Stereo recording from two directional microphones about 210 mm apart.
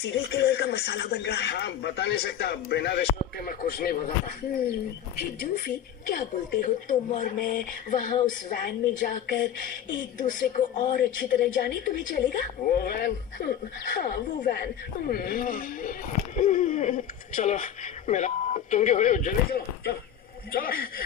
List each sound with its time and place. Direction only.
0.0 s speech: 50° left (ahead or behind)
10.1 s speech: 40° left (ahead or behind)